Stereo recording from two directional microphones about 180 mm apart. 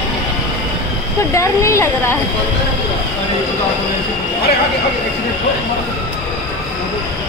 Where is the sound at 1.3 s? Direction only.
15° left (ahead or behind).